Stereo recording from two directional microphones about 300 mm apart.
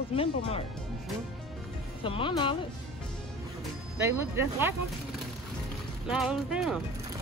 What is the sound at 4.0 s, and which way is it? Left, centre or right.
Speech, centre.